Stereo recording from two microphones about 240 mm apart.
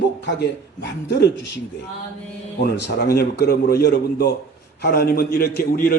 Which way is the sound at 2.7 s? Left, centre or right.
Left.